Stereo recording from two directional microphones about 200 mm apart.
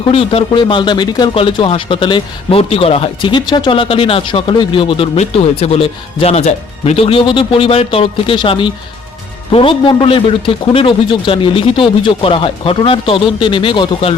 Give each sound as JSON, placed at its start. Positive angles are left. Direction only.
{"t": 0.1, "sound": "speech", "side_deg": 30}